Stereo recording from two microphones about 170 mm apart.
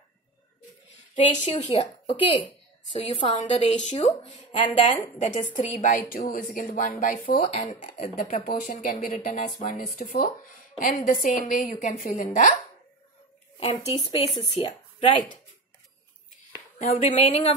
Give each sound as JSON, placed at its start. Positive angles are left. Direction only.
{"t": 1.1, "sound": "a woman's voice", "side_deg": 45}
{"t": 4.9, "sound": "a woman's voice", "side_deg": 45}
{"t": 7.4, "sound": "a woman's voice", "side_deg": 35}
{"t": 9.4, "sound": "a woman's voice", "side_deg": 40}
{"t": 13.6, "sound": "a woman's voice", "side_deg": 30}
{"t": 16.7, "sound": "a woman's voice", "side_deg": 40}